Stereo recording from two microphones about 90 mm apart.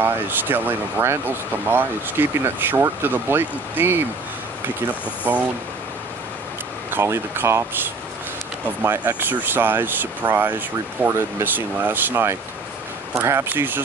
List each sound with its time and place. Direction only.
0.0 s speech: 25° right (ahead or behind)
5.3 s speech: 25° right (ahead or behind)
6.9 s speech: 25° right (ahead or behind)